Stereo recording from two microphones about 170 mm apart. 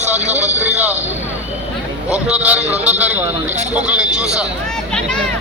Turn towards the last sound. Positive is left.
turn(degrees=-5)  # may be behind; listen again after turning